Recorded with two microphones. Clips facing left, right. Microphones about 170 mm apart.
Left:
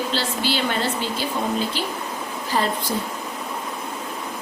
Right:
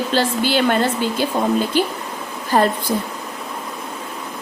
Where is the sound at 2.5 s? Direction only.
50° right (ahead or behind).